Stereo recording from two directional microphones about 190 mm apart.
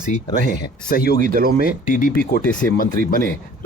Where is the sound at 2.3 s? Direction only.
45° left (ahead or behind).